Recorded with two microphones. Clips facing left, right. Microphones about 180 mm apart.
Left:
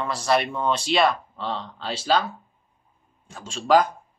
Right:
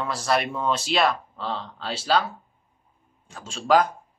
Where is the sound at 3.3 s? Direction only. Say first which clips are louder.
Left 1 dB; centre (ahead or behind).